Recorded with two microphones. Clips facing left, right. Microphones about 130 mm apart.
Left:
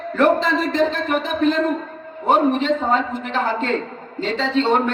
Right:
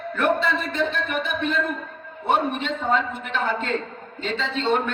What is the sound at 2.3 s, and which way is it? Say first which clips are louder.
A man's voice: left 6 dB; 40° left (ahead or behind).